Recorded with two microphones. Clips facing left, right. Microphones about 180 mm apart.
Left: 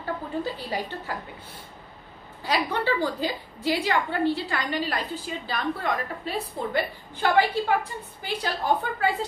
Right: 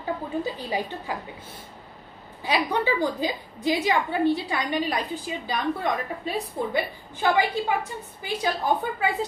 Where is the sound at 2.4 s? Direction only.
15° right (ahead or behind).